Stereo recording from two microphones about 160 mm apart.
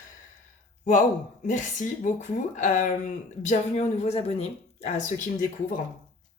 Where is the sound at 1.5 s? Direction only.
50° left (ahead or behind).